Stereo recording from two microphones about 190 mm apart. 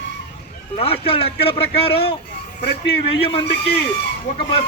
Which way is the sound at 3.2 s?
30° left (ahead or behind).